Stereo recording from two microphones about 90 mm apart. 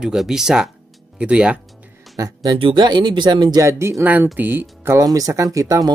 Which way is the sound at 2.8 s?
55° right (ahead or behind).